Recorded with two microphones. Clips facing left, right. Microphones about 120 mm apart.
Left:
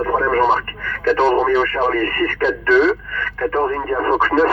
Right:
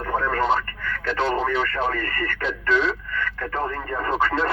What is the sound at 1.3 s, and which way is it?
Speech, 75° left (ahead or behind).